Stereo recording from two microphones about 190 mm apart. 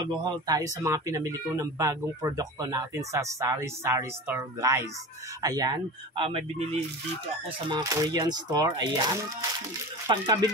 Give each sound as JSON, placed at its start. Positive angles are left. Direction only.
{"t": 0.0, "sound": "speech", "side_deg": -20}
{"t": 7.6, "sound": "speech", "side_deg": -20}